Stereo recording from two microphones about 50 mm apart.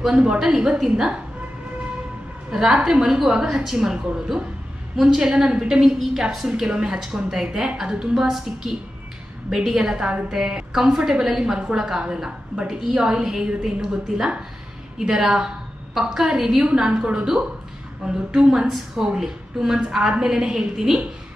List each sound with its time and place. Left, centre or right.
0.0 s a woman's voice: centre
2.7 s a woman's voice: centre